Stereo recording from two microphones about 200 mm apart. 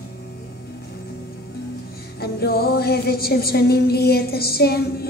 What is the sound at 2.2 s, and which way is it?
Music, 50° left (ahead or behind).